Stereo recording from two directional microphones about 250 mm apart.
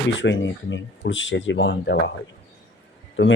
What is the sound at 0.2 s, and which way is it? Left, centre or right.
Speech, left.